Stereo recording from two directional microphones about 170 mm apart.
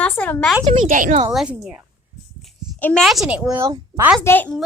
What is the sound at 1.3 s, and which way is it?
Speech, centre (ahead or behind).